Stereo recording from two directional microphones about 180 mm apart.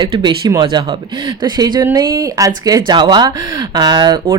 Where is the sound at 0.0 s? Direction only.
25° right (ahead or behind).